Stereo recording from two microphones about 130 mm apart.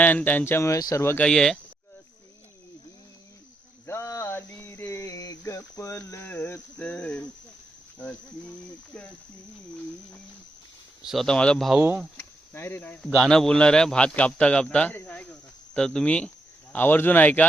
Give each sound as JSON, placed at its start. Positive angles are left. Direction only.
{"t": 0.0, "sound": "a man's voice", "side_deg": 15}
{"t": 1.2, "sound": "speech", "side_deg": 5}
{"t": 3.8, "sound": "a sound", "side_deg": 20}
{"t": 7.9, "sound": "a man's voice", "side_deg": 5}
{"t": 11.0, "sound": "speech", "side_deg": 0}
{"t": 12.1, "sound": "a man's voice", "side_deg": 20}